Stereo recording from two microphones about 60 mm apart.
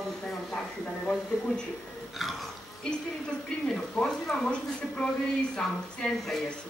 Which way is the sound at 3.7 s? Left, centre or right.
Centre.